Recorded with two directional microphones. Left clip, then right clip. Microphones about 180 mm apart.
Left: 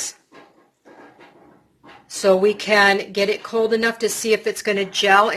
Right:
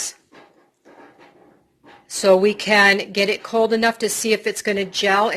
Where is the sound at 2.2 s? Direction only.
35° right (ahead or behind).